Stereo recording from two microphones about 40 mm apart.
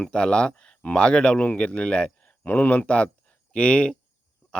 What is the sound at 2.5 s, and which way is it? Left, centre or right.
Speech, left.